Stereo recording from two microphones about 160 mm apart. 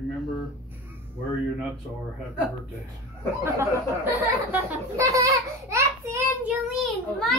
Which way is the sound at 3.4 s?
15° right (ahead or behind).